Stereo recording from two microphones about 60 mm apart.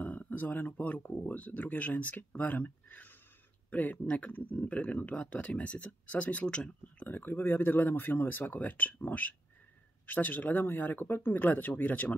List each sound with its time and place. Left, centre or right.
0.0 s speech: left
7.1 s speech: left